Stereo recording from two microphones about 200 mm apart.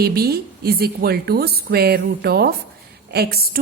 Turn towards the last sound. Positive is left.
turn(degrees=-50)  # may be behind; listen again after turning